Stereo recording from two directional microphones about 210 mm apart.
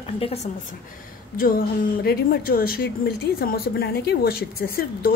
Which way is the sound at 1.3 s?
45° left (ahead or behind).